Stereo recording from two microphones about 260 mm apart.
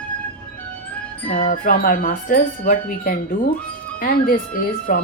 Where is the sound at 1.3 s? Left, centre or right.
Left.